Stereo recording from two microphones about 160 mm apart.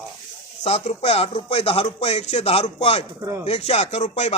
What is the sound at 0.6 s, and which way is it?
Speech, 40° left (ahead or behind).